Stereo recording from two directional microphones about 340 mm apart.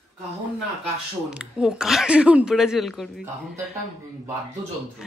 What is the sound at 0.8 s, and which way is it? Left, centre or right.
A woman's voice, centre.